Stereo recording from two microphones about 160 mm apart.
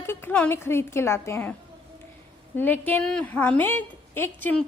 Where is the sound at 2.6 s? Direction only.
10° left (ahead or behind).